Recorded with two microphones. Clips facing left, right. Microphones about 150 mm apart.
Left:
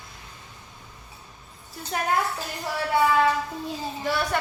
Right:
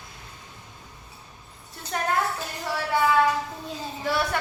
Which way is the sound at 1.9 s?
5° left (ahead or behind).